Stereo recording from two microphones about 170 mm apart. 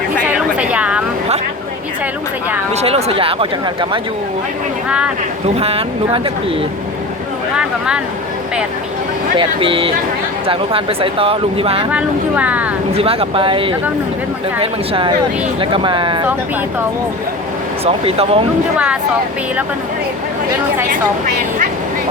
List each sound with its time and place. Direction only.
0.3 s a sound: 5° right (ahead or behind)
2.8 s speech: 35° right (ahead or behind)
4.9 s speech: 5° right (ahead or behind)
5.5 s speech: 35° right (ahead or behind)
7.5 s speech: 5° right (ahead or behind)
9.4 s speech: 30° right (ahead or behind)
11.9 s speech: 10° right (ahead or behind)
12.9 s speech: 35° right (ahead or behind)
17.8 s speech: 35° right (ahead or behind)